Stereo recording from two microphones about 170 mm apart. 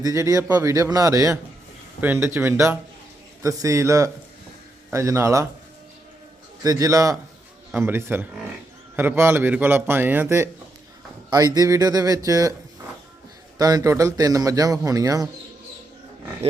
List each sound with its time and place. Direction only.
0.0 s a man's voice: 20° right (ahead or behind)
6.6 s a man's voice: 20° right (ahead or behind)
13.6 s speech: 20° right (ahead or behind)
16.4 s a sound: 35° right (ahead or behind)